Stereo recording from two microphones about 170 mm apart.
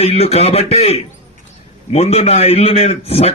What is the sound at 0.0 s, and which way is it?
A man's voice, 35° left (ahead or behind).